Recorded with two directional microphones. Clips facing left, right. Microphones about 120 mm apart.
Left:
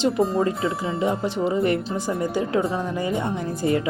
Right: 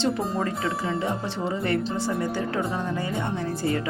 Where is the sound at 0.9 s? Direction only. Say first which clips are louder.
Left 5 dB; 15° left (ahead or behind).